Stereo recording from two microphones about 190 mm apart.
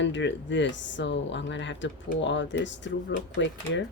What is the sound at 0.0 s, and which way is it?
Speech, 70° left (ahead or behind).